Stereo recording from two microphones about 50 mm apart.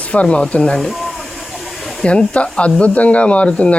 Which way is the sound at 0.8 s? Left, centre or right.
Centre.